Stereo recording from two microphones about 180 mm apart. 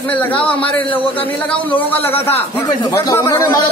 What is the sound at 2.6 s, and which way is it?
Speech, 20° left (ahead or behind).